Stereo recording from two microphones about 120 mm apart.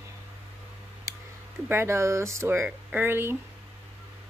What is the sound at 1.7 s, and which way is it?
Speech, 20° right (ahead or behind).